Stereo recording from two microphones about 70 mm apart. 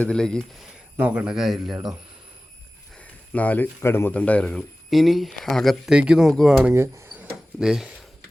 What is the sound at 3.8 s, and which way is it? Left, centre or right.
Speech, left.